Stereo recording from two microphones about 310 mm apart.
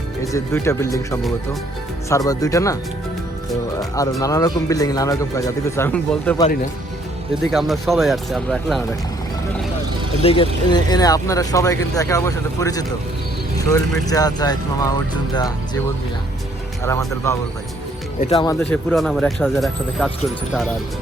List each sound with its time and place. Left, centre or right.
0.2 s speech: centre
3.8 s music: centre
4.2 s speech: centre
7.5 s speech: centre
10.2 s speech: centre
16.8 s speech: centre
18.6 s speech: centre